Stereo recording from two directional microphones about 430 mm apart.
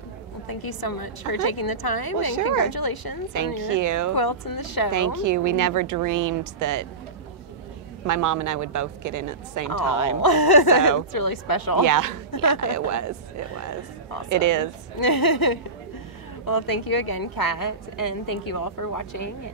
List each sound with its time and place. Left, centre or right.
0.5 s a woman's voice: left
3.7 s a woman's voice: right
4.1 s a woman's voice: left
4.9 s a woman's voice: right
8.1 s a woman's voice: right
10.2 s a woman's voice: left
11.8 s a woman's voice: right
12.3 s speech: left
12.7 s speech: right
14.3 s a woman's voice: right
15.0 s a woman's voice: left